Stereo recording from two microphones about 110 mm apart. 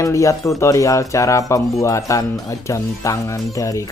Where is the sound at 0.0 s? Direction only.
30° left (ahead or behind).